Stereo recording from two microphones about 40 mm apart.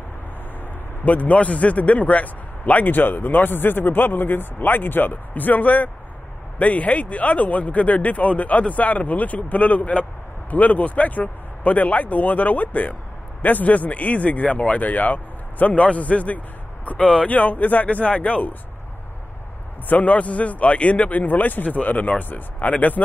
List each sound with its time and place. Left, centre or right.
1.0 s a man's voice: left
19.9 s speech: left